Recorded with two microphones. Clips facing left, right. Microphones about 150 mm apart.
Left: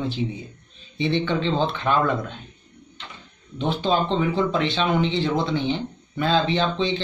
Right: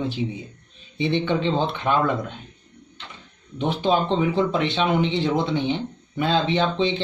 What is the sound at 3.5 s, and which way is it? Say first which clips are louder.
Speech: right 1 dB; 15° right (ahead or behind).